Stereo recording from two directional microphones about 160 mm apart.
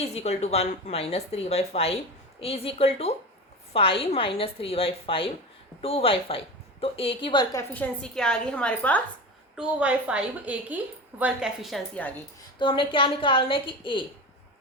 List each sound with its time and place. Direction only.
0.0 s speech: 40° left (ahead or behind)
7.5 s a woman's voice: 10° left (ahead or behind)
9.6 s a woman's voice: 10° right (ahead or behind)
12.5 s speech: 30° left (ahead or behind)